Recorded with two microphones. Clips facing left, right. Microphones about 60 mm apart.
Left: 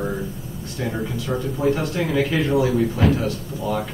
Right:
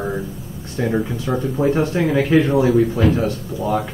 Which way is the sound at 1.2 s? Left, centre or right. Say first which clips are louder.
Even; right.